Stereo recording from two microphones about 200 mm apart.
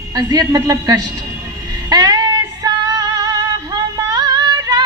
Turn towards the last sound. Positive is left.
turn(degrees=-20)  # may be behind; listen again after turning